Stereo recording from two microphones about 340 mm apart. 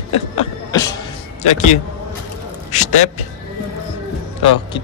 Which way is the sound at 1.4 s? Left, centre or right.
Centre.